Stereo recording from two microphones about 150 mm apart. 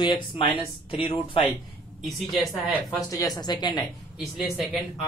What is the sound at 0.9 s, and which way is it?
Speech, 35° left (ahead or behind).